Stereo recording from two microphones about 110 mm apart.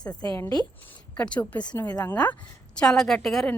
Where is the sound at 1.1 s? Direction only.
10° left (ahead or behind).